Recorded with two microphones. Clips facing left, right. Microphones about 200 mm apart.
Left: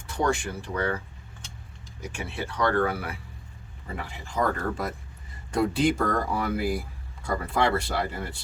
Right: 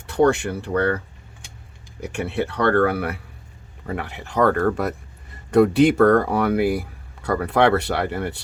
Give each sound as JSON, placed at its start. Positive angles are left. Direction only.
{"t": 0.1, "sound": "speech", "side_deg": -65}
{"t": 2.0, "sound": "speech", "side_deg": -65}